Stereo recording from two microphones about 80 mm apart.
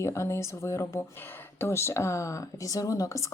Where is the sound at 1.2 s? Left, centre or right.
Left.